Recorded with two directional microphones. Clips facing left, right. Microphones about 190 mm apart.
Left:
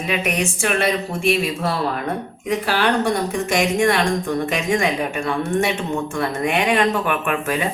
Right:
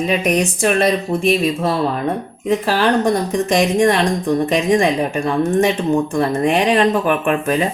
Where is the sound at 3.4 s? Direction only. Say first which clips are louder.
Right 4 dB; 35° right (ahead or behind).